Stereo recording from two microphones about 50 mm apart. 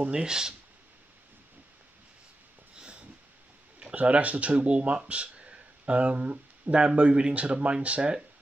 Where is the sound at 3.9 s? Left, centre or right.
Right.